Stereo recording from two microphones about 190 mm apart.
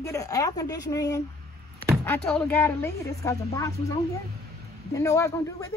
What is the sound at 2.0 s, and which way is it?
A woman's voice, 5° left (ahead or behind).